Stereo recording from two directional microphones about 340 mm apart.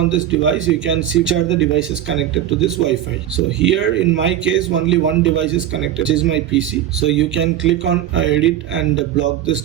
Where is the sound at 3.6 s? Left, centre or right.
Right.